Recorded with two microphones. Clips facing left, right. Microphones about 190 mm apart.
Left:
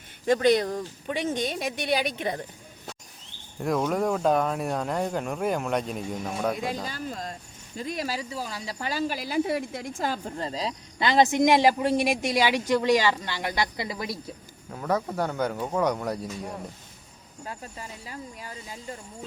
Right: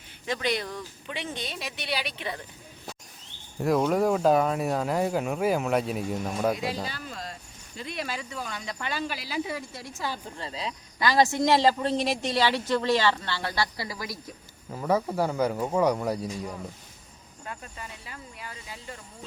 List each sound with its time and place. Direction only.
0.3 s speech: 45° left (ahead or behind)
3.6 s speech: centre (ahead or behind)
6.8 s speech: 45° left (ahead or behind)
10.0 s speech: 40° left (ahead or behind)
11.0 s a man's voice: 20° left (ahead or behind)
14.7 s speech: 5° right (ahead or behind)
17.4 s speech: 30° left (ahead or behind)